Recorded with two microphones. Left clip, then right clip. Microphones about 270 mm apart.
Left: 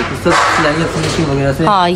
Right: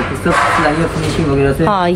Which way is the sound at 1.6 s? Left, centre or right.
Centre.